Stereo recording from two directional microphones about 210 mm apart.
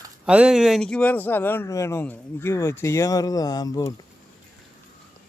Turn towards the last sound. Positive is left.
turn(degrees=20)  # may be behind; listen again after turning